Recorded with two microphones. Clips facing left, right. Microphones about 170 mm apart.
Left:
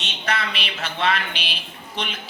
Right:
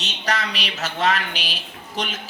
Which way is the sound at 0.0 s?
40° right (ahead or behind).